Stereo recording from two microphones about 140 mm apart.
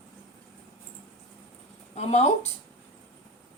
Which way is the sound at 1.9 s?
55° left (ahead or behind).